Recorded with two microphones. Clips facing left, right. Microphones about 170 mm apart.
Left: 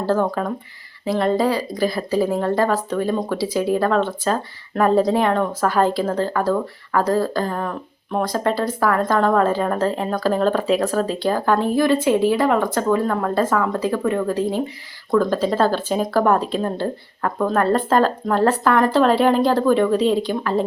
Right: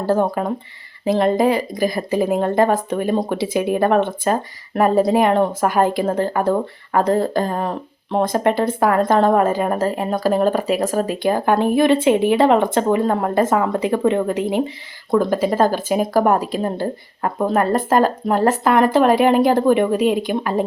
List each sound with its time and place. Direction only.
0.0 s speech: 15° right (ahead or behind)